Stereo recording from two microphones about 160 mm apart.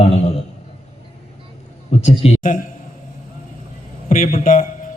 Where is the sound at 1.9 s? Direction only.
45° left (ahead or behind).